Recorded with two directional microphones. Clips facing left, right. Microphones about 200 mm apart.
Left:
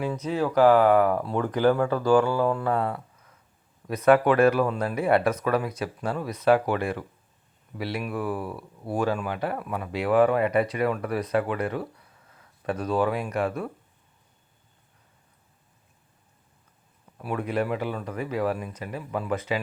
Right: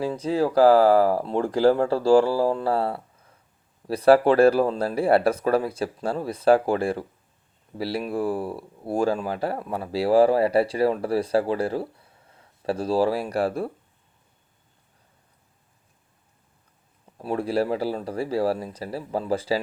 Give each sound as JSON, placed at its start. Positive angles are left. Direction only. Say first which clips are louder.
{"t": 0.0, "sound": "speech", "louder": "right 3 dB", "side_deg": -30}
{"t": 17.2, "sound": "speech", "louder": "right 3 dB", "side_deg": -30}